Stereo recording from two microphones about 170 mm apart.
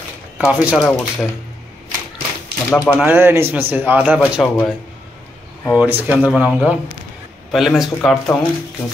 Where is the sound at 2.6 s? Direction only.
5° left (ahead or behind).